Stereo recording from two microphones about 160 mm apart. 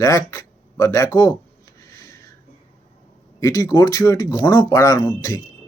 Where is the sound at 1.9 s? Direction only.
20° left (ahead or behind).